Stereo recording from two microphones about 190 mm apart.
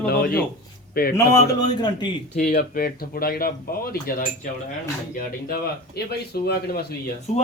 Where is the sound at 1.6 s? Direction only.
20° left (ahead or behind).